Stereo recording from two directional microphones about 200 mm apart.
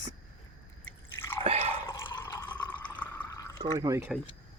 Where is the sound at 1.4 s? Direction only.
30° right (ahead or behind).